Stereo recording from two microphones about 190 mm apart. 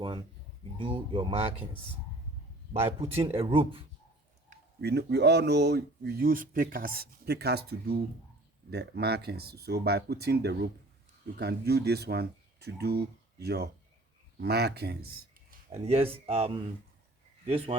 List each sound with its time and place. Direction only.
0.0 s speech: 25° right (ahead or behind)
3.0 s speech: 30° right (ahead or behind)
4.8 s speech: 60° right (ahead or behind)
15.7 s a man's voice: 30° right (ahead or behind)